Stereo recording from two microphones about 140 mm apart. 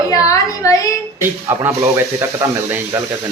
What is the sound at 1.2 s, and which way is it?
Speech, 15° right (ahead or behind).